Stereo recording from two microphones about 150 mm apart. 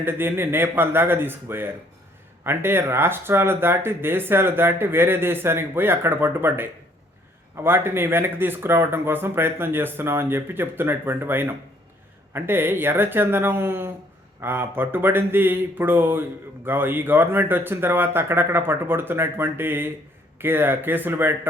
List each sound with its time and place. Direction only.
0.0 s speech: 15° right (ahead or behind)